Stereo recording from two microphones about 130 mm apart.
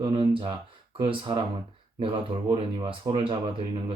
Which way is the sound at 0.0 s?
45° right (ahead or behind).